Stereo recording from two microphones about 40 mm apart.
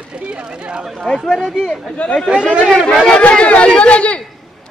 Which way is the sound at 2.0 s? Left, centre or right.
Left.